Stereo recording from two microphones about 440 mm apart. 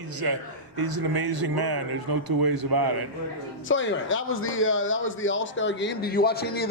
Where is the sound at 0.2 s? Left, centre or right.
Right.